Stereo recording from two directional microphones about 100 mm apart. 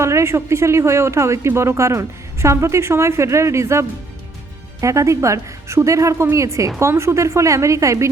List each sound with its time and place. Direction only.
0.0 s a woman's voice: 30° right (ahead or behind)